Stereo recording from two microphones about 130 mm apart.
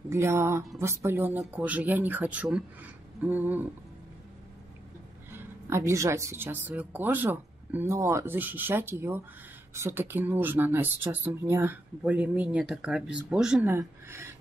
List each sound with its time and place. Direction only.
0.1 s speech: 20° right (ahead or behind)
5.3 s speech: 20° right (ahead or behind)
13.7 s speech: 20° right (ahead or behind)